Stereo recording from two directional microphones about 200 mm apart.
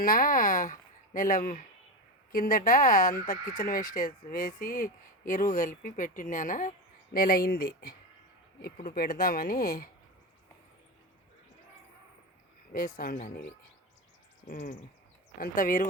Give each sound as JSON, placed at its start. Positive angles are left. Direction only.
{"t": 0.0, "sound": "speech", "side_deg": 45}
{"t": 12.7, "sound": "speech", "side_deg": 45}
{"t": 14.4, "sound": "speech", "side_deg": 40}